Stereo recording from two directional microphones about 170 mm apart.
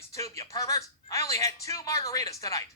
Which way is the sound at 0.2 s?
20° left (ahead or behind).